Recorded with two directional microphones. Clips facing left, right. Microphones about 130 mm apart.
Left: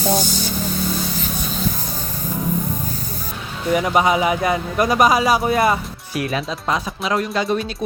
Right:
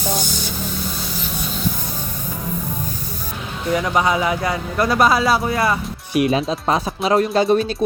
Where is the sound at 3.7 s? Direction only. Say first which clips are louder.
Left 2 dB; 20° left (ahead or behind).